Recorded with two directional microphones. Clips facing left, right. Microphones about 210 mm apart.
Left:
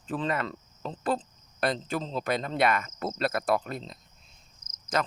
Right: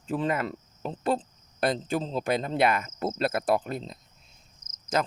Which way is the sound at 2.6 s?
25° right (ahead or behind).